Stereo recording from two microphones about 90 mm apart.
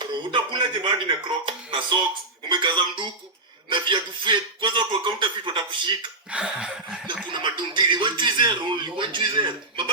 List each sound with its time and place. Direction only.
0.0 s speech: 60° right (ahead or behind)
6.3 s laughter: 10° right (ahead or behind)
7.3 s speech: 65° right (ahead or behind)